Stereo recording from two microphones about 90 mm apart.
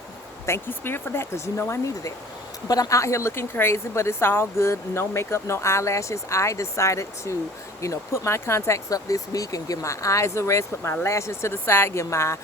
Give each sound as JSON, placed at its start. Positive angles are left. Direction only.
{"t": 0.4, "sound": "a woman's voice", "side_deg": 25}